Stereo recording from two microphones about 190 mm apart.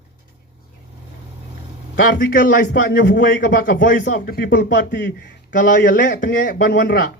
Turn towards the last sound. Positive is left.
turn(degrees=55)  # may be behind; listen again after turning